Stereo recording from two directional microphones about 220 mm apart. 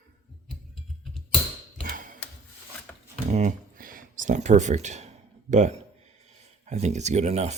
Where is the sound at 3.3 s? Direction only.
35° right (ahead or behind).